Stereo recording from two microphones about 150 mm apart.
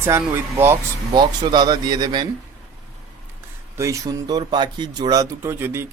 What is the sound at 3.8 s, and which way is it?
Speech, 20° right (ahead or behind).